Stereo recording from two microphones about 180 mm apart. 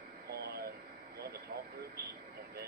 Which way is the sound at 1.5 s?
55° right (ahead or behind).